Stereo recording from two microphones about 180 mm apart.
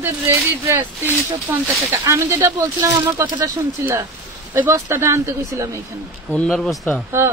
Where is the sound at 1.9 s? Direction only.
15° right (ahead or behind).